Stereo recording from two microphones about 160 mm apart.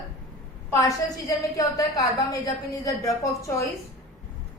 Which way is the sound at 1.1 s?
20° left (ahead or behind).